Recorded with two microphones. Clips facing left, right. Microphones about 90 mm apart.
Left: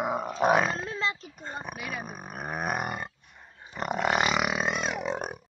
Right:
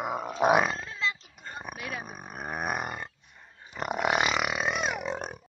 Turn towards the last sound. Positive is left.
turn(degrees=5)  # may be behind; listen again after turning